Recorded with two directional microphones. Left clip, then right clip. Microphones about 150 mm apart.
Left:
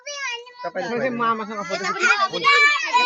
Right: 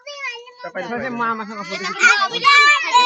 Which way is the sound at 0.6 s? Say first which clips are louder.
Even; 35° left (ahead or behind).